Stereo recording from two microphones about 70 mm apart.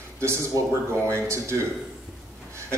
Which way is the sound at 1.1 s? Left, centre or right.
Right.